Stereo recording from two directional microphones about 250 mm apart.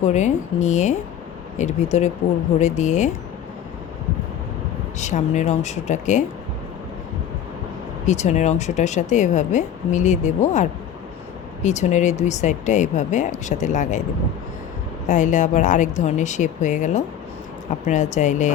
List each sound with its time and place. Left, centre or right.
0.0 s speech: left
4.9 s speech: left
8.0 s speech: left
15.0 s speech: left